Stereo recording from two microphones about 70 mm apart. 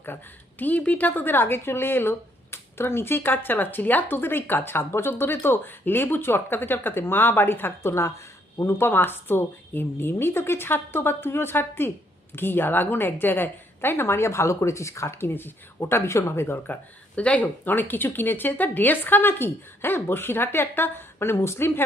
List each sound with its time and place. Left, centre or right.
0.6 s speech: left
15.2 s speech: left
17.2 s speech: centre; by 21.8 s left